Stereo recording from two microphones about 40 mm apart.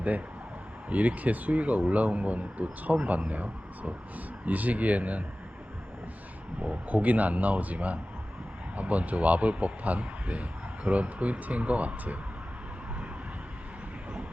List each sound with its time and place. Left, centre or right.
0.9 s speech: right
6.8 s speech: right